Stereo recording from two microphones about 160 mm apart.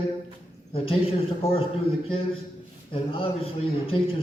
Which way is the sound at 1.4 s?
35° left (ahead or behind).